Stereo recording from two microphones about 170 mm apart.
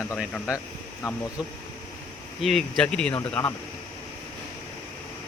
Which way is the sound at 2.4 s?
Centre (ahead or behind).